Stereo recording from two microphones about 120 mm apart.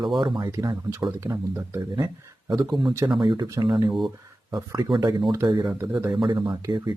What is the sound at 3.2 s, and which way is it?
Speech, 40° right (ahead or behind).